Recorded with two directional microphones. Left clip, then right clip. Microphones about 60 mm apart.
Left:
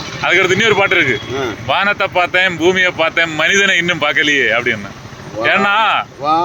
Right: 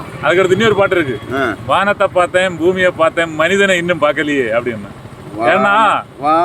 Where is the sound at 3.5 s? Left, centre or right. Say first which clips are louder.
Left 2 dB; centre.